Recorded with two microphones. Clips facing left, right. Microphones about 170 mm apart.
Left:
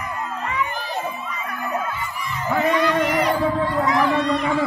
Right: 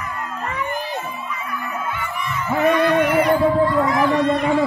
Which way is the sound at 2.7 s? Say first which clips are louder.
Right 5 dB; 60° right (ahead or behind).